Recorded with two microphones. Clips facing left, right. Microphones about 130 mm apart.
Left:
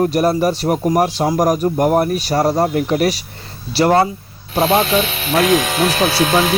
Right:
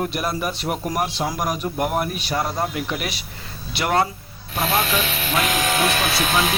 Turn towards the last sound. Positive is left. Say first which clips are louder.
# left 6 dB
turn(degrees=90)